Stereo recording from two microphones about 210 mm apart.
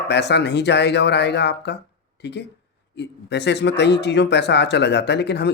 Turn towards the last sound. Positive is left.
turn(degrees=55)  # may be behind; listen again after turning